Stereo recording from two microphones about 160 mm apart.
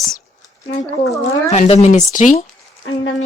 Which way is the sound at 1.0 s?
20° left (ahead or behind).